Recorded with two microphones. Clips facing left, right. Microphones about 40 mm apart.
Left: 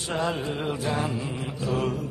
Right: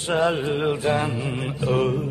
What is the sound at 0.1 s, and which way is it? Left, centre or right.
Mantra, right.